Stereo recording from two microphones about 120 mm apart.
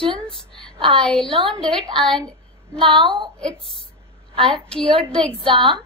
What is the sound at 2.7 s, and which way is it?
Speech, 45° right (ahead or behind).